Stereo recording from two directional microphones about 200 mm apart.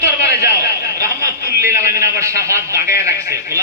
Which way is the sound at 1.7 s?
15° right (ahead or behind).